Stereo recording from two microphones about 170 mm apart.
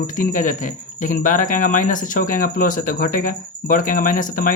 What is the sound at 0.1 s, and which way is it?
Speech, 50° left (ahead or behind).